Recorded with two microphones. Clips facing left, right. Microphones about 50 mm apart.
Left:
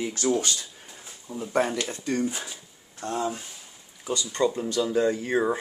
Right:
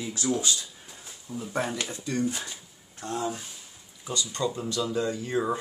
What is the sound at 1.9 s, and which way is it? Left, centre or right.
Speech, left.